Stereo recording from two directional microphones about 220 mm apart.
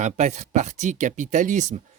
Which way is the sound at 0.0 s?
30° right (ahead or behind).